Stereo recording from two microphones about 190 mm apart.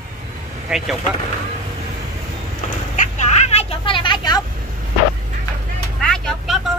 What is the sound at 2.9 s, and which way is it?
Vehicle, 40° left (ahead or behind).